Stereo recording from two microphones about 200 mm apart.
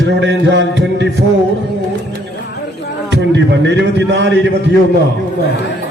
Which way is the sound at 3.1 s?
60° right (ahead or behind).